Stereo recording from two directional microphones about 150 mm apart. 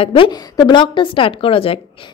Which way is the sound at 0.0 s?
30° left (ahead or behind).